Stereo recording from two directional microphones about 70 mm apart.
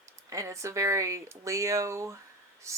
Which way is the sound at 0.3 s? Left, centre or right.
Right.